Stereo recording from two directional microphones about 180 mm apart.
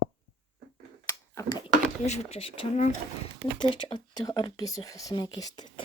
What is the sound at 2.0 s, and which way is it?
Speech, 35° left (ahead or behind).